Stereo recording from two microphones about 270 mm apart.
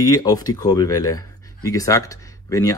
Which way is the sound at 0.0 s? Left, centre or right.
Centre.